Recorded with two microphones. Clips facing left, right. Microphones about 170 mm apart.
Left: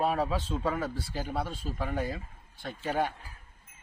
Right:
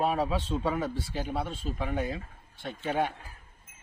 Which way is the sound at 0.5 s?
5° right (ahead or behind).